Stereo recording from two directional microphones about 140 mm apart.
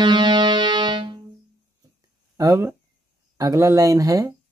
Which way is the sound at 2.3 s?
20° right (ahead or behind).